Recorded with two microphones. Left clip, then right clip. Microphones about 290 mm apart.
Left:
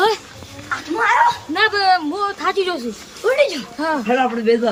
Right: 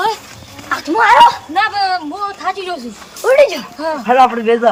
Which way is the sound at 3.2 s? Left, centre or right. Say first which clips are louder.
Right 6 dB; centre.